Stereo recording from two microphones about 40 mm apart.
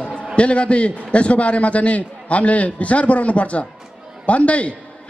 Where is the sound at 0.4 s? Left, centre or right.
Left.